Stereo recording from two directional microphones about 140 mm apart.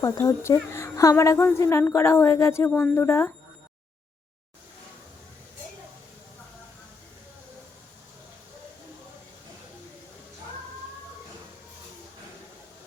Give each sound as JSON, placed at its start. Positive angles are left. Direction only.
{"t": 0.0, "sound": "a woman's voice", "side_deg": 20}